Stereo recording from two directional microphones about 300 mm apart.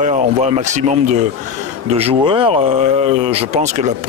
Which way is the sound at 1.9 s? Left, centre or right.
Centre.